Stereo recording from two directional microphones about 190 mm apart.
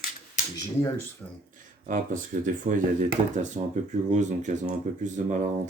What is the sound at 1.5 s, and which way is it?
Speech, 45° right (ahead or behind).